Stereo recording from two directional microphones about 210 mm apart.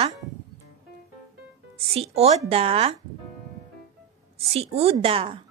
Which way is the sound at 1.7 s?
30° right (ahead or behind).